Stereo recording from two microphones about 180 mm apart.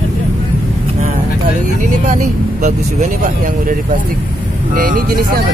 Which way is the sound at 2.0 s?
40° right (ahead or behind).